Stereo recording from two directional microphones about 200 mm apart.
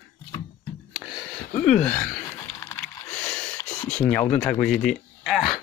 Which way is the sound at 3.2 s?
5° left (ahead or behind).